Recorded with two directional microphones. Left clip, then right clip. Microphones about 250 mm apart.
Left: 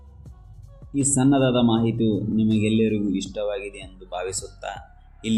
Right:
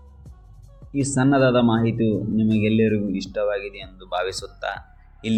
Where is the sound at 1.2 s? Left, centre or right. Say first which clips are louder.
Right 3 dB; right.